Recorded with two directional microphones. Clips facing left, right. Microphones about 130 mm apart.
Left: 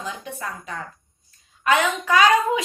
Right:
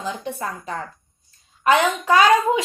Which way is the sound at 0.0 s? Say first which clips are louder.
Right 4 dB; 30° right (ahead or behind).